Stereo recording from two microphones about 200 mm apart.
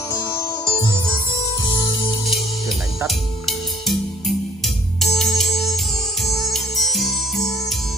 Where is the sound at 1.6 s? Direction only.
20° left (ahead or behind).